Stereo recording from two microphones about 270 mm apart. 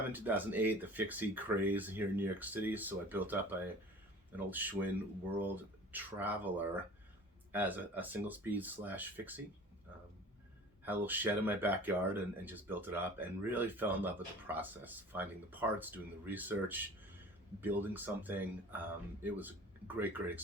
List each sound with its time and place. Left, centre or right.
0.1 s speech: centre
5.9 s speech: centre
10.8 s speech: centre